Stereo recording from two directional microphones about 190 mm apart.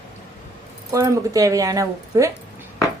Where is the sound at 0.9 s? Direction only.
20° right (ahead or behind).